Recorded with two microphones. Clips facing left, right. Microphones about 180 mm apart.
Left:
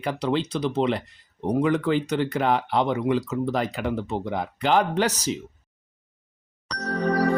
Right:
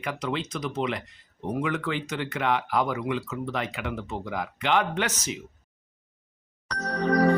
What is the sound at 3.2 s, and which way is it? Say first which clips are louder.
Speech: left 6 dB; 35° left (ahead or behind).